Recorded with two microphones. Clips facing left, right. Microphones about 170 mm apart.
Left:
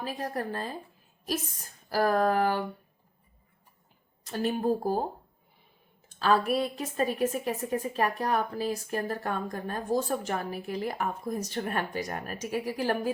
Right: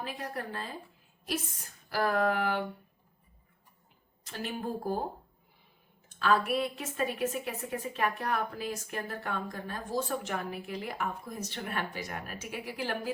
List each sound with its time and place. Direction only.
0.0 s a woman's voice: 40° left (ahead or behind)
1.9 s a woman's voice: 35° left (ahead or behind)
4.3 s a woman's voice: 40° left (ahead or behind)
6.1 s a woman's voice: 35° left (ahead or behind)